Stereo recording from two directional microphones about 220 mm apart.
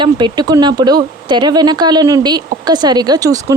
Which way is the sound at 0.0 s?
20° right (ahead or behind).